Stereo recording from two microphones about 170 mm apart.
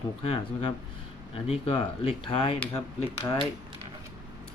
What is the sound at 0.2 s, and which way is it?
Speech, 35° left (ahead or behind).